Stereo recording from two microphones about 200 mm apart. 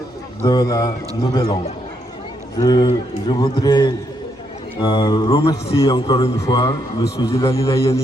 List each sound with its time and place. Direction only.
0.4 s a man's voice: 20° left (ahead or behind)